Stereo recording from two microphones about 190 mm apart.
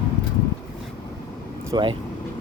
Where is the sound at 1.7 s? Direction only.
25° right (ahead or behind).